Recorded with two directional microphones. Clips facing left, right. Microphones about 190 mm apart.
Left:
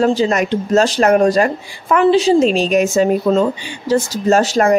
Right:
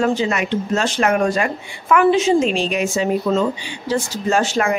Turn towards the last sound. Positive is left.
turn(degrees=40)  # may be behind; listen again after turning